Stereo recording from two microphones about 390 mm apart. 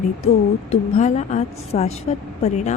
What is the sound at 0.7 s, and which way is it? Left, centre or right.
A woman's voice, centre.